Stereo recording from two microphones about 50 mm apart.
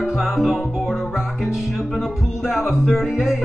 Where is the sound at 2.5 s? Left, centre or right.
Centre.